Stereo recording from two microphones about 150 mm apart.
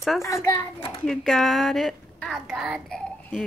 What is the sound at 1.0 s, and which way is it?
A child's voice, 5° left (ahead or behind).